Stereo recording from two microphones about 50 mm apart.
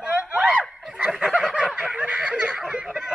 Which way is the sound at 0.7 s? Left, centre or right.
Centre.